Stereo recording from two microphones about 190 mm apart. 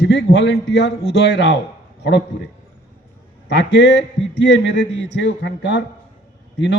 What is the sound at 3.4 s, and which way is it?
A man's voice, 70° left (ahead or behind).